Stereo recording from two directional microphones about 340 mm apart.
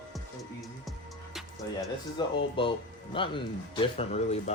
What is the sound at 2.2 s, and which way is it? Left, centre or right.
Speech, centre.